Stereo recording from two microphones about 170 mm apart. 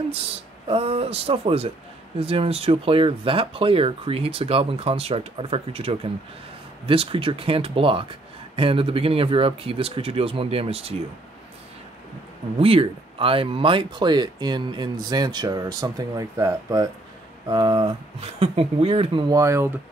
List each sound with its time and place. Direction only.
0.1 s speech: 35° right (ahead or behind)
12.5 s speech: 35° right (ahead or behind); by 19.7 s 15° right (ahead or behind)